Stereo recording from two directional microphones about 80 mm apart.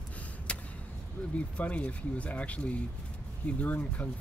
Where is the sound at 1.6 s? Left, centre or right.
Centre.